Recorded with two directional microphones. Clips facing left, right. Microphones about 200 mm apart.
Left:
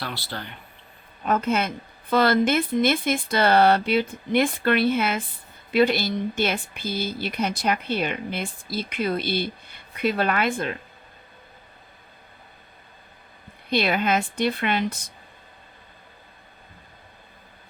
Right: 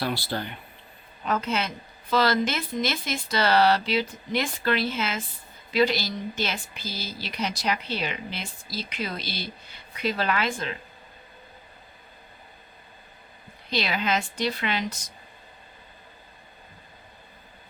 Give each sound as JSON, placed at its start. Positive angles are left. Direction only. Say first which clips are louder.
{"t": 0.0, "sound": "speech", "louder": "right 5 dB", "side_deg": -15}
{"t": 1.2, "sound": "a woman's voice", "louder": "left 4 dB", "side_deg": 50}
{"t": 13.7, "sound": "speech", "louder": "left 5 dB", "side_deg": 55}